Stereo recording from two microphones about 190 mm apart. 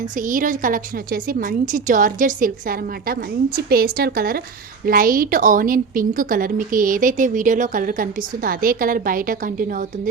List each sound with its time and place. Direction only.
0.2 s a woman's voice: 45° right (ahead or behind)